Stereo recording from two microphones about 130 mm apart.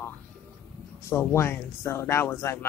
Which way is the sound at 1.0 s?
20° left (ahead or behind).